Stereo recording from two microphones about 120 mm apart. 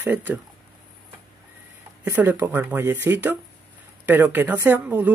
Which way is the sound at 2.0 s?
20° right (ahead or behind).